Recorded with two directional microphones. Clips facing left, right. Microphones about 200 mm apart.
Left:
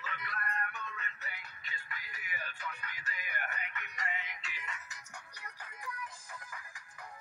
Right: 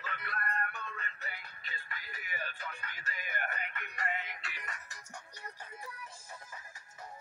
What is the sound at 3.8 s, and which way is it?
Music, 55° right (ahead or behind).